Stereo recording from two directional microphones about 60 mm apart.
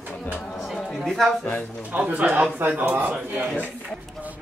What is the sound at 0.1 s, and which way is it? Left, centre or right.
Chatter, centre.